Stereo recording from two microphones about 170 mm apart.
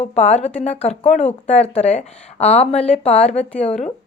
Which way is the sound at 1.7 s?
45° left (ahead or behind).